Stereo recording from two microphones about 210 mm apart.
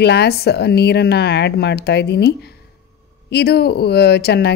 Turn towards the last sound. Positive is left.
turn(degrees=50)  # may be behind; listen again after turning